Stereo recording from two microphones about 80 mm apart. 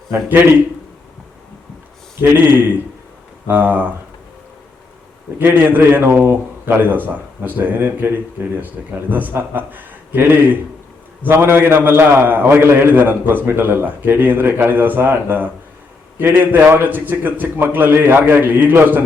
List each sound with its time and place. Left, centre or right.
2.2 s a man's voice: right
5.4 s a man's voice: right